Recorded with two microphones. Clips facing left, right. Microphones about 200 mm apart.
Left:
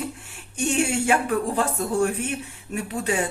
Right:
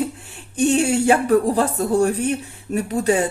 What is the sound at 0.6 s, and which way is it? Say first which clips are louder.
Speech: right 6 dB; 35° right (ahead or behind).